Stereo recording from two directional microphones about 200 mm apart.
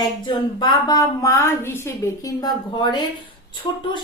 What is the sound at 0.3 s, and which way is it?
A woman's voice, 20° left (ahead or behind).